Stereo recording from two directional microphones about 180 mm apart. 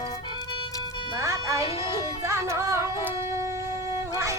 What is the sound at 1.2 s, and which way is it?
Music, 15° right (ahead or behind).